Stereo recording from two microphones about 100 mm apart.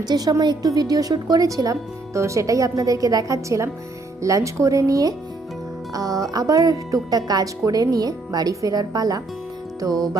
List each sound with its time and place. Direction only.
0.0 s a woman's voice: 40° right (ahead or behind)